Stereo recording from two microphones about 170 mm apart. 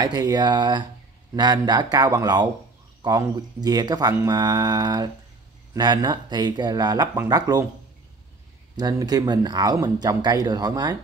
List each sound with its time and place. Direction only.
0.0 s speech: 25° right (ahead or behind)
8.7 s speech: 20° right (ahead or behind)